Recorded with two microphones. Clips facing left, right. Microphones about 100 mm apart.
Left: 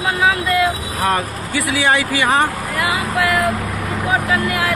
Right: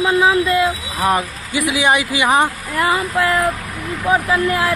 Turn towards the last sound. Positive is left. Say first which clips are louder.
# right 2 dB
turn(degrees=-25)  # may be behind; listen again after turning